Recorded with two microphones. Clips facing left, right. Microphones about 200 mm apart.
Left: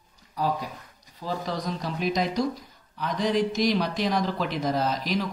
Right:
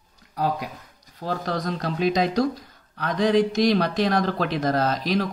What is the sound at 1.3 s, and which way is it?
Speech, 75° right (ahead or behind).